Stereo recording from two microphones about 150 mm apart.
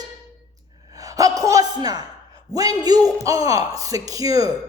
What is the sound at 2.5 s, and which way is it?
Speech, 25° right (ahead or behind).